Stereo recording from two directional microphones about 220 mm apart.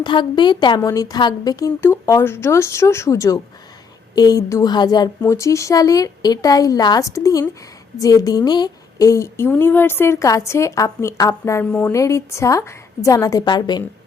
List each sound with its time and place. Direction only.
0.0 s a woman's voice: 20° left (ahead or behind)